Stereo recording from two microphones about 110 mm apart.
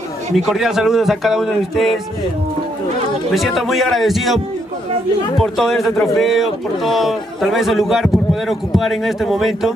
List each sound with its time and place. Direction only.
0.5 s a man's voice: 5° right (ahead or behind)
3.3 s a man's voice: centre (ahead or behind)
5.4 s a man's voice: centre (ahead or behind)